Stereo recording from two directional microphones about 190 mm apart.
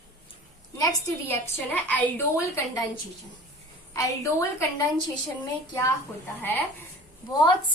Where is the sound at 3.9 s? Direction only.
15° left (ahead or behind).